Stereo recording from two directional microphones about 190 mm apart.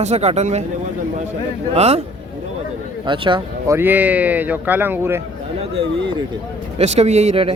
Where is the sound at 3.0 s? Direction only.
25° right (ahead or behind).